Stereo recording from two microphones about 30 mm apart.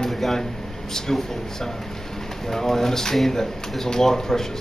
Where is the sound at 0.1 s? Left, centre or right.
Centre.